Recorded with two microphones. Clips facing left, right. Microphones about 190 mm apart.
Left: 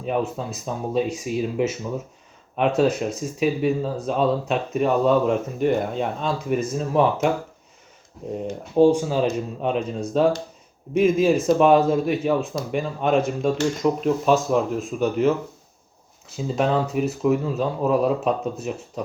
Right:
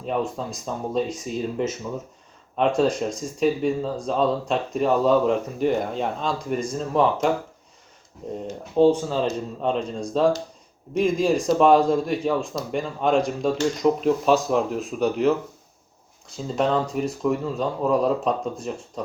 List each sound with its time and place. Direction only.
0.0 s speech: 5° left (ahead or behind)
8.8 s speech: 10° left (ahead or behind)
16.6 s speech: 5° left (ahead or behind)